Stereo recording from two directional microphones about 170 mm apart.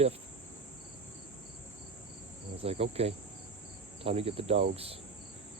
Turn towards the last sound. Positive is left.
turn(degrees=-35)  # may be behind; listen again after turning